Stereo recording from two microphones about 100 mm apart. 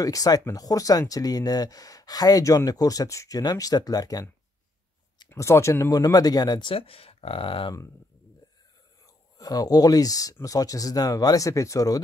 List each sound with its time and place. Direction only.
0.0 s speech: 35° left (ahead or behind)
5.3 s speech: 30° left (ahead or behind)
6.7 s speech: 75° left (ahead or behind)
9.0 s speech: 40° left (ahead or behind)